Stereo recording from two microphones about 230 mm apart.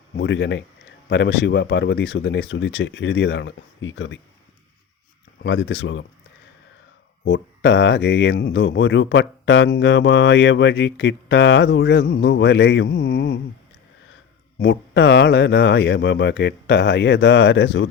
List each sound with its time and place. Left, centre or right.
0.2 s speech: left
5.4 s speech: left
7.3 s speech: left
14.6 s speech: left